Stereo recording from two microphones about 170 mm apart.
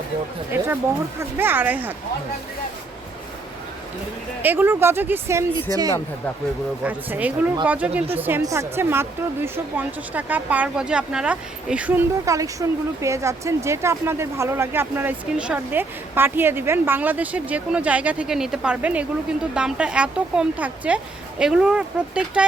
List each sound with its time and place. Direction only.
0.5 s a woman's voice: 10° right (ahead or behind)
4.4 s a woman's voice: 10° right (ahead or behind)
6.8 s a woman's voice: 10° right (ahead or behind)